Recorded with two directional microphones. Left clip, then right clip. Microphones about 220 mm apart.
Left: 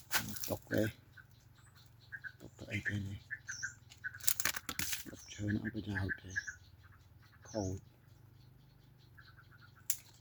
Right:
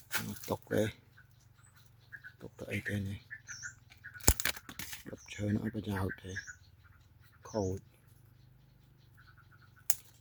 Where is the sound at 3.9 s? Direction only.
15° right (ahead or behind).